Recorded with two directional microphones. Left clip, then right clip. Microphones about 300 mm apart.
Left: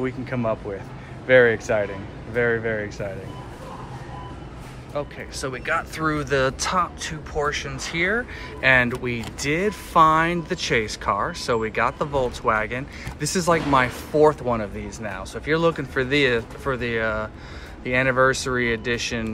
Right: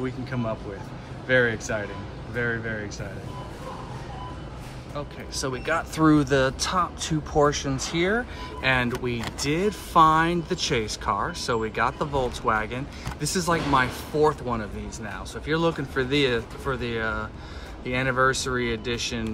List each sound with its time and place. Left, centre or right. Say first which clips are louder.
0.0 s speech: left 5 dB; centre
4.9 s speech: left 4 dB; centre
7.1 s speech: right 3 dB; right